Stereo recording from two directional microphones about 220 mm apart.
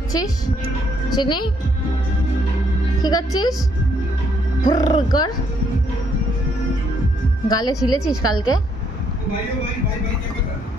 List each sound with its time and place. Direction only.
1.1 s speech: 20° left (ahead or behind)
3.0 s a woman's voice: 15° left (ahead or behind)
4.6 s speech: 15° left (ahead or behind)
7.4 s speech: 20° left (ahead or behind)
7.7 s a woman's voice: centre (ahead or behind)
8.2 s a woman's voice: 75° left (ahead or behind)